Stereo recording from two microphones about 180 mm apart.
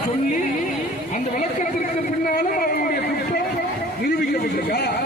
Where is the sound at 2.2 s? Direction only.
50° left (ahead or behind).